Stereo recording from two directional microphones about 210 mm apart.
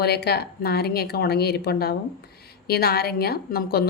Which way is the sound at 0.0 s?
50° left (ahead or behind).